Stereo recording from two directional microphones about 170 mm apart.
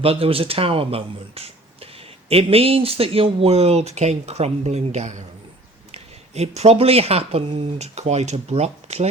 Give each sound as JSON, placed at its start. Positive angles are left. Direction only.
{"t": 0.0, "sound": "speech", "side_deg": -35}